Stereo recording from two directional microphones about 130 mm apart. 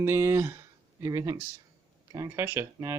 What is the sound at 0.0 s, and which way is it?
Speech, 20° right (ahead or behind).